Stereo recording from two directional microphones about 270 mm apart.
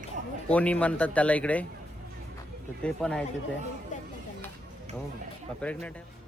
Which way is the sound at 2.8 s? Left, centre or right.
Centre.